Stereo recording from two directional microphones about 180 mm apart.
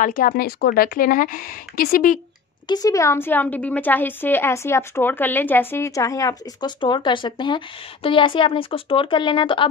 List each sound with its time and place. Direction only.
0.0 s speech: 50° left (ahead or behind)
2.7 s a woman's voice: 20° left (ahead or behind)